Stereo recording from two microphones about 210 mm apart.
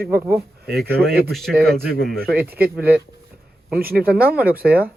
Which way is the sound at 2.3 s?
45° right (ahead or behind).